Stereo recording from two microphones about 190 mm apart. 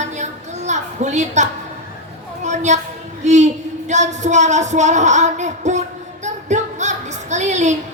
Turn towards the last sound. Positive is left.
turn(degrees=-40)  # may be behind; listen again after turning